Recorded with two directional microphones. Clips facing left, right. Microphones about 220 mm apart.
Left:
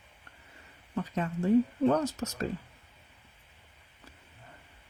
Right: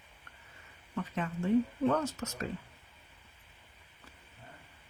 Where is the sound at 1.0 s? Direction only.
35° left (ahead or behind).